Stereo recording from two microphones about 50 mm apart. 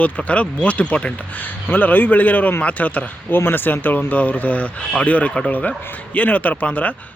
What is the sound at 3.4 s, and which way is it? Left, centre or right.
Speech, left.